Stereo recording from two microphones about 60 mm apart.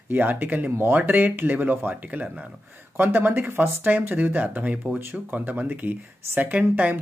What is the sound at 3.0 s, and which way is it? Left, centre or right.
Speech, right.